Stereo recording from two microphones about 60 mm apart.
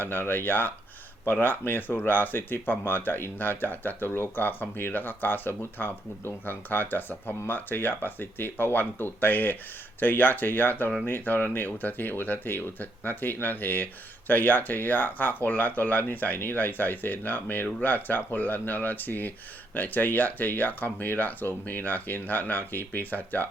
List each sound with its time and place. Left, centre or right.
0.0 s speech: left